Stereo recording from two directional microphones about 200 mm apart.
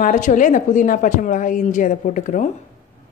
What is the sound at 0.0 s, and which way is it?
A woman's voice, 40° left (ahead or behind).